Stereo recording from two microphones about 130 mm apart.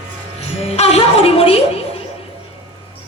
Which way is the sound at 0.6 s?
55° left (ahead or behind).